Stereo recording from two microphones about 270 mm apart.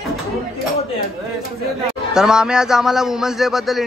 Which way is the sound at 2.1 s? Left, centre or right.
Centre.